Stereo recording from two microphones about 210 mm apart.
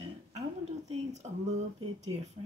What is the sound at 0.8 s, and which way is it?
Speech, 30° right (ahead or behind).